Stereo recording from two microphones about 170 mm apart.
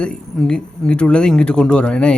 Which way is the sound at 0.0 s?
5° left (ahead or behind).